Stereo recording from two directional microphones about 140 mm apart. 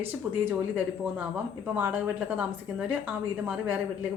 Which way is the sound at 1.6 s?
10° right (ahead or behind).